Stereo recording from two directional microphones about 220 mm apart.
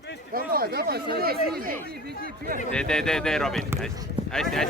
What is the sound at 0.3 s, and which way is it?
Speech, 45° right (ahead or behind).